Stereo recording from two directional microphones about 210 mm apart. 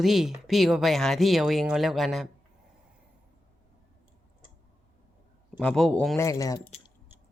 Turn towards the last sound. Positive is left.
turn(degrees=15)  # may be behind; listen again after turning